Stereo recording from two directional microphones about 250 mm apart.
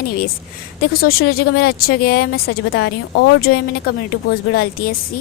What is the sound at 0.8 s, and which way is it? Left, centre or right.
Speech, left.